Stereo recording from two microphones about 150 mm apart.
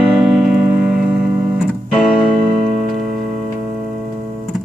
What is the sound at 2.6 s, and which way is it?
Music, 50° right (ahead or behind).